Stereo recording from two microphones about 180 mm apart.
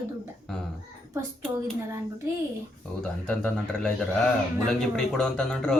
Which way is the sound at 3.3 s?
5° left (ahead or behind).